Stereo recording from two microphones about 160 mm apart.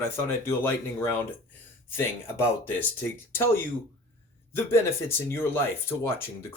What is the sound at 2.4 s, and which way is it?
Speech, 10° left (ahead or behind).